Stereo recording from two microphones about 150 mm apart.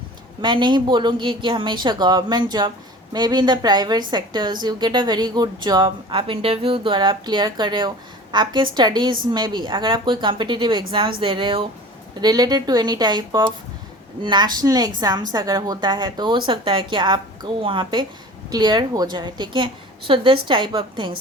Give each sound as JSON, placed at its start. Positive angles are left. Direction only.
{"t": 0.4, "sound": "a woman's voice", "side_deg": -30}